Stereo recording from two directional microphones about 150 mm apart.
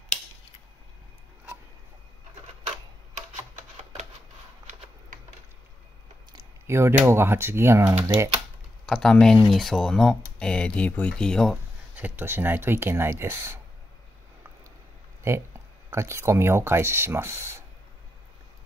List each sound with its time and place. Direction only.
6.3 s a sound: 20° right (ahead or behind)
7.1 s speech: 15° right (ahead or behind)
8.8 s speech: 5° left (ahead or behind)
11.9 s speech: 10° right (ahead or behind)
15.2 s speech: 15° right (ahead or behind)